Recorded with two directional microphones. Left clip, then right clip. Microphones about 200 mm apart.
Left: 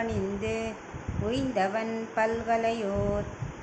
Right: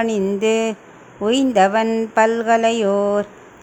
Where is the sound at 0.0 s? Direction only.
55° right (ahead or behind).